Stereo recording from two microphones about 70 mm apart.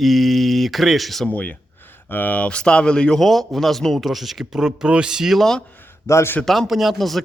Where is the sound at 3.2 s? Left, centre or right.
Centre.